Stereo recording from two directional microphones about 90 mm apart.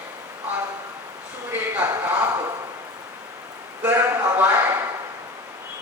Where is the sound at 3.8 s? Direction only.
25° right (ahead or behind).